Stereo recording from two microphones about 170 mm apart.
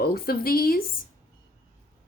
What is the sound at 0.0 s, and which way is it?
Speech, 65° left (ahead or behind).